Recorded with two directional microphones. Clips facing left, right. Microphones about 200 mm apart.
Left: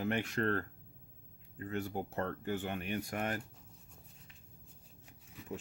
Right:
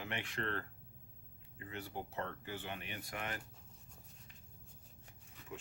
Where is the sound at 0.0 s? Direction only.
40° left (ahead or behind).